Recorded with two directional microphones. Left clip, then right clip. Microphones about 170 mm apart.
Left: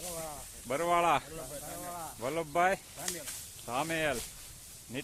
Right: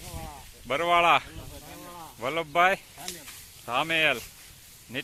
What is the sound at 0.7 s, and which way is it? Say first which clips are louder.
Speech: right 7 dB; 5° right (ahead or behind).